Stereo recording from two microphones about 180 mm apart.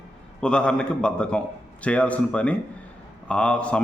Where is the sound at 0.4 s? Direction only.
5° left (ahead or behind).